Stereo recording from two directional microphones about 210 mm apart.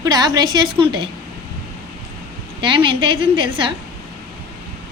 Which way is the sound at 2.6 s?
25° right (ahead or behind).